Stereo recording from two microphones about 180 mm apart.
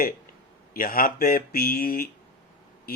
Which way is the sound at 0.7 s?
50° left (ahead or behind).